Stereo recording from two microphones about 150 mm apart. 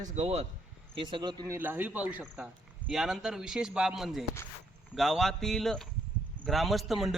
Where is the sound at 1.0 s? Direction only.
30° right (ahead or behind).